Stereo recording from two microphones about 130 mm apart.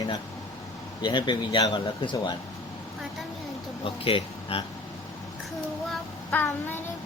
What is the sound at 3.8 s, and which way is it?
Speech, 45° left (ahead or behind).